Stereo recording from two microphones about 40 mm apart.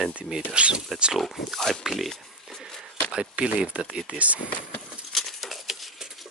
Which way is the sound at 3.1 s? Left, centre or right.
Right.